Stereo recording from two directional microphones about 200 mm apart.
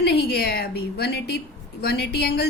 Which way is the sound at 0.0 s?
55° left (ahead or behind).